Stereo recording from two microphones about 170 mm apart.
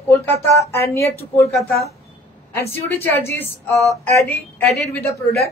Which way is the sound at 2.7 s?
15° left (ahead or behind).